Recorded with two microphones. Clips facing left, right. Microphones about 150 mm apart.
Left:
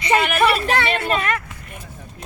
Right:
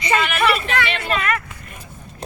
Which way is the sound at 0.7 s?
30° left (ahead or behind).